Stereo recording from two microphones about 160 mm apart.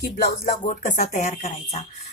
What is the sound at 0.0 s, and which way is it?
Speech, 70° left (ahead or behind).